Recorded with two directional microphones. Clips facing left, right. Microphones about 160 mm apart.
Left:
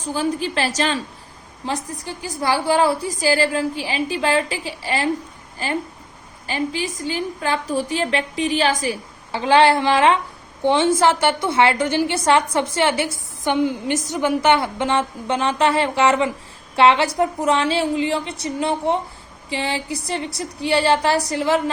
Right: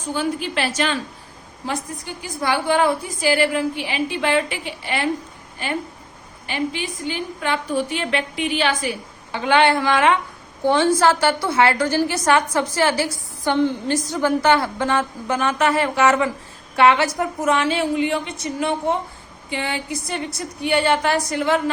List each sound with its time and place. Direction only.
0.1 s a woman's voice: 35° left (ahead or behind)
2.2 s a woman's voice: 35° left (ahead or behind)
6.5 s a woman's voice: 40° left (ahead or behind)
21.2 s a woman's voice: 20° left (ahead or behind)